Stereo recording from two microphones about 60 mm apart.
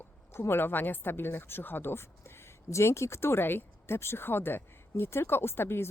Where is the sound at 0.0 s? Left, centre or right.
Left.